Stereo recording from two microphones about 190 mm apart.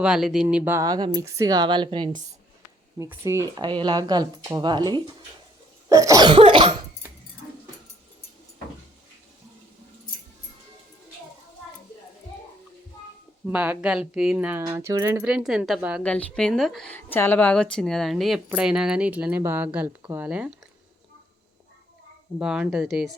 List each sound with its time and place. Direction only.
0.0 s speech: 5° right (ahead or behind); by 6.7 s 25° right (ahead or behind)
13.5 s speech: 5° right (ahead or behind)
16.0 s a woman's voice: 5° left (ahead or behind)
22.4 s a woman's voice: 5° right (ahead or behind)